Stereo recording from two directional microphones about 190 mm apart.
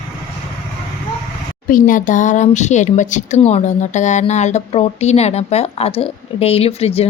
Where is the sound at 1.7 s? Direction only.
45° left (ahead or behind).